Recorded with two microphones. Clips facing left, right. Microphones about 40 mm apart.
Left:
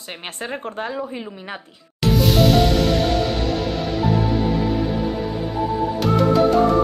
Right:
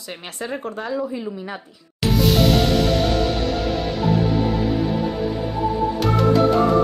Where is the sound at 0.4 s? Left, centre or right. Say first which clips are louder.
Even; left.